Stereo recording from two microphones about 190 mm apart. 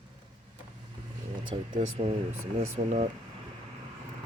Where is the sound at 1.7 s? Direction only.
30° right (ahead or behind).